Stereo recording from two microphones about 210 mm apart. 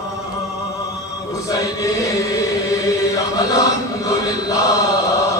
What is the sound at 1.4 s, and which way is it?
Chant, 15° left (ahead or behind).